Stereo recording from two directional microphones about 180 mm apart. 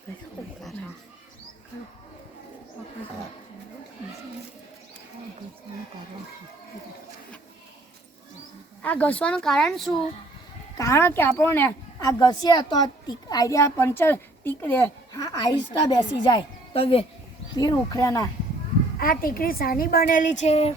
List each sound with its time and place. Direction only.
8.8 s speech: 10° left (ahead or behind)
10.8 s a woman's voice: 15° left (ahead or behind); by 17.1 s 30° left (ahead or behind)
17.5 s speech: 20° left (ahead or behind)
18.9 s a woman's voice: 55° left (ahead or behind); by 20.7 s 35° left (ahead or behind)